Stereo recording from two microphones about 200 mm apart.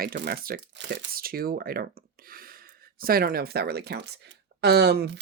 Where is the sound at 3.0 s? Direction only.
50° right (ahead or behind).